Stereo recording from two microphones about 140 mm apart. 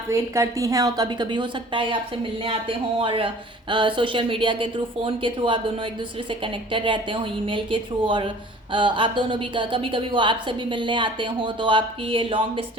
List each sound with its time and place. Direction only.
0.1 s a woman's voice: 20° right (ahead or behind); by 12.6 s 40° right (ahead or behind)